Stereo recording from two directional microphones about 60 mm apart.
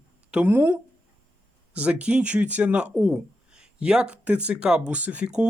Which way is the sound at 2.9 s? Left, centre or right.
Centre.